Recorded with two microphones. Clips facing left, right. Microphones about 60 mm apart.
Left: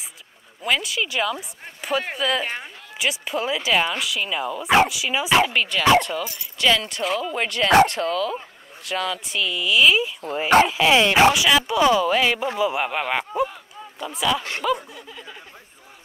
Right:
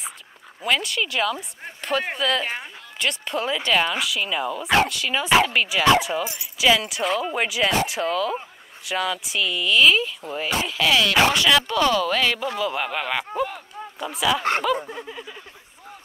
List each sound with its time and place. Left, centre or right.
0.6 s speech: centre
6.2 s speech: centre
6.6 s speech: centre
10.7 s speech: left
11.3 s speech: centre
13.9 s speech: centre
15.0 s speech: centre